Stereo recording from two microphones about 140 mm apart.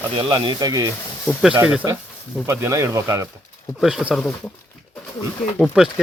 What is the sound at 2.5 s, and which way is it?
Speech, 20° right (ahead or behind).